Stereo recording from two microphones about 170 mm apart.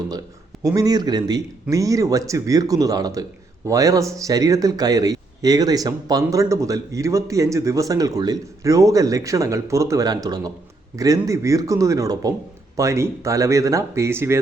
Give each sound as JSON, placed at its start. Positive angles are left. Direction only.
{"t": 0.6, "sound": "a man's voice", "side_deg": -20}